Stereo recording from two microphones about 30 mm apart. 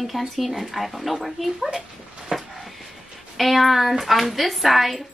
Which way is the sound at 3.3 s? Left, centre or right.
Centre.